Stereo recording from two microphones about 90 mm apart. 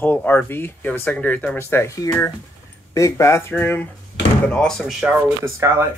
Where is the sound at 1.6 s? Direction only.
30° left (ahead or behind).